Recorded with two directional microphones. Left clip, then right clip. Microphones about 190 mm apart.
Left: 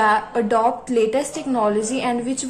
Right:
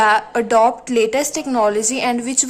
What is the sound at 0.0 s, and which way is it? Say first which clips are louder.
A woman's voice: right 3 dB; 40° right (ahead or behind).